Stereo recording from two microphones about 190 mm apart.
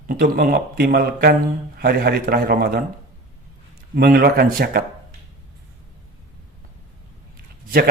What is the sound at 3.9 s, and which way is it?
Speech, 50° right (ahead or behind).